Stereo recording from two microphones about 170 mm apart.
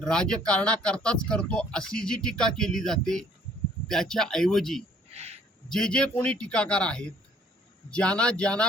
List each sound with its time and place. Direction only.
0.0 s speech: 5° left (ahead or behind)
5.1 s a sound: 40° right (ahead or behind)
5.6 s speech: 5° left (ahead or behind)